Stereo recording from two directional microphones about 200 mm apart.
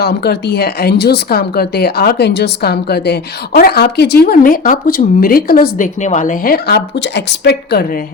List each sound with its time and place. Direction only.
0.0 s speech: 55° left (ahead or behind)